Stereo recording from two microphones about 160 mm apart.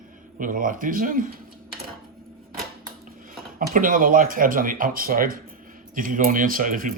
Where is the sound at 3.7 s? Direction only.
60° right (ahead or behind).